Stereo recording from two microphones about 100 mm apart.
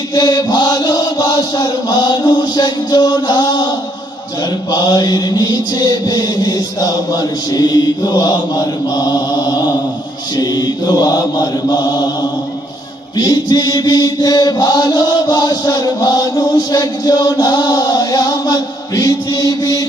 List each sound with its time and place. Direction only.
0.1 s chant: 45° left (ahead or behind)
4.7 s chant: 40° left (ahead or behind)
13.1 s chant: 40° left (ahead or behind)